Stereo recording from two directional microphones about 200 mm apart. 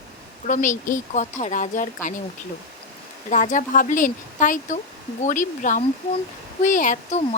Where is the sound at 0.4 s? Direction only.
40° left (ahead or behind).